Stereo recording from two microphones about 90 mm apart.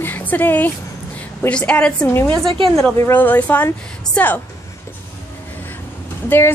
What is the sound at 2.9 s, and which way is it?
Speech, 30° left (ahead or behind).